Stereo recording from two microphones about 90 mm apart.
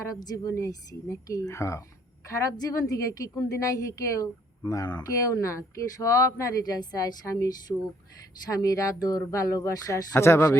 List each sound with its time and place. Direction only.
0.5 s speech: 35° left (ahead or behind)